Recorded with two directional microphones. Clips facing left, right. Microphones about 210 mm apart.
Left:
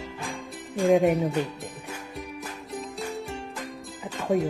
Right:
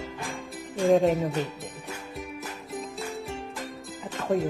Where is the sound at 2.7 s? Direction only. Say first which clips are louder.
Left 1 dB; centre (ahead or behind).